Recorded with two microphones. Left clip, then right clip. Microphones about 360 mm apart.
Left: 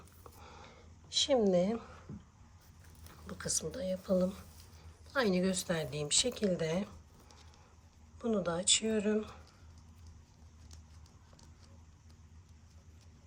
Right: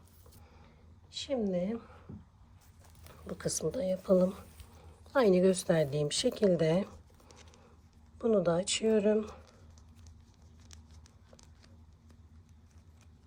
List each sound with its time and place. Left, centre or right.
1.2 s speech: centre
3.2 s speech: centre